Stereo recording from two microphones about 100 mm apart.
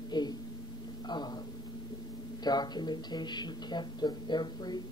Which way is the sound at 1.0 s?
45° left (ahead or behind).